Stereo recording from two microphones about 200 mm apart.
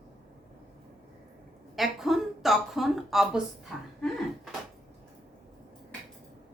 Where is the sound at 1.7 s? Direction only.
Centre (ahead or behind).